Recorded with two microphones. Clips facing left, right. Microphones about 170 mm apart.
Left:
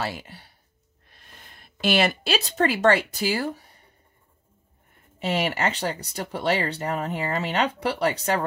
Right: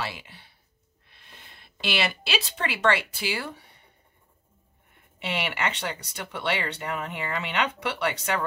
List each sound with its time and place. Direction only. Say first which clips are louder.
0.0 s speech: left 4 dB; 45° left (ahead or behind)
4.9 s speech: left 6 dB; 40° left (ahead or behind)